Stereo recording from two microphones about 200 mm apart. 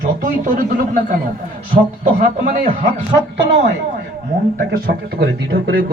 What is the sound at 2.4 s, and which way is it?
Music, 40° right (ahead or behind).